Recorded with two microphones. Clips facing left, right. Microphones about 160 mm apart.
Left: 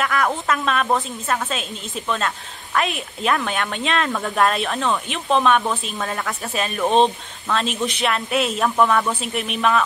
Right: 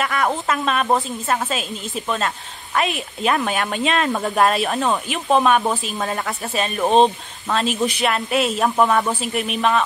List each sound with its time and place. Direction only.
0.0 s speech: centre (ahead or behind)
0.8 s speech: 20° right (ahead or behind)
1.3 s speech: centre (ahead or behind)
8.6 s speech: 20° right (ahead or behind)
9.2 s speech: centre (ahead or behind)